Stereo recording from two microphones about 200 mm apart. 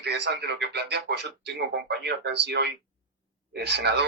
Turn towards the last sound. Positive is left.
turn(degrees=-60)  # may be behind; listen again after turning